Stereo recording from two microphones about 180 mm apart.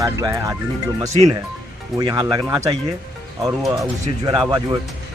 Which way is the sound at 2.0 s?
25° right (ahead or behind).